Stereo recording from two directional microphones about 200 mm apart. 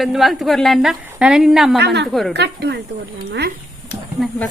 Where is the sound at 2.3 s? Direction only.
55° right (ahead or behind).